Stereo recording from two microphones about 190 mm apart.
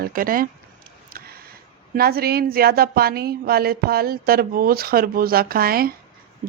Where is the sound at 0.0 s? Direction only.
50° right (ahead or behind).